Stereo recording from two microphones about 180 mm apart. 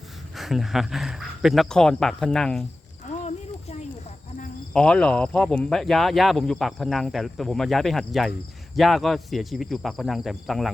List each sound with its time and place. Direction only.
0.3 s speech: centre (ahead or behind)
3.1 s a sound: 35° left (ahead or behind)
4.7 s speech: 5° left (ahead or behind)